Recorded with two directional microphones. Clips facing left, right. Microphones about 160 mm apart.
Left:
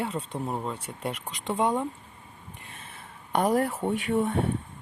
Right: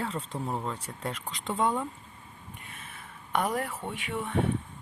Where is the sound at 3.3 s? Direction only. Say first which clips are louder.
Left 6 dB; 35° left (ahead or behind).